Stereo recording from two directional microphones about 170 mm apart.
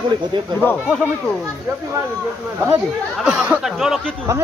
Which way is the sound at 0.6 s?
10° left (ahead or behind).